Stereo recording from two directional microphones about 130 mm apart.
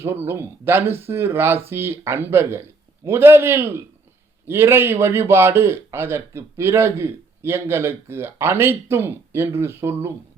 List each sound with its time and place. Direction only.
0.0 s a man's voice: 20° right (ahead or behind)